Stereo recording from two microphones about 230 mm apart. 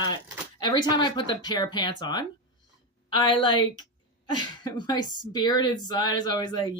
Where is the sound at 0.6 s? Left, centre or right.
Centre.